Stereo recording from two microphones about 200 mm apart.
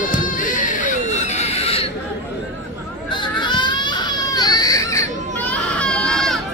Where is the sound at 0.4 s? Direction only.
40° left (ahead or behind).